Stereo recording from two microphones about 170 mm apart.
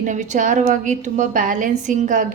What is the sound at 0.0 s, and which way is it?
A woman's voice, 50° right (ahead or behind).